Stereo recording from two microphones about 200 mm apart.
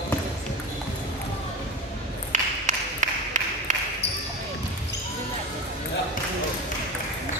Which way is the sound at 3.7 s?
40° right (ahead or behind).